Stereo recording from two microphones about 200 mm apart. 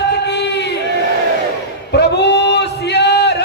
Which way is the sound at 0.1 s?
60° left (ahead or behind).